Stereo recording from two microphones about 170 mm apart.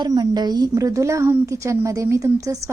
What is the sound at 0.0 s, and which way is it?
A woman's voice, 25° right (ahead or behind).